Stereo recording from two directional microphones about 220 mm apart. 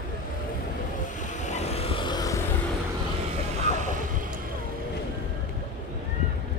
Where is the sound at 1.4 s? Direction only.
30° left (ahead or behind).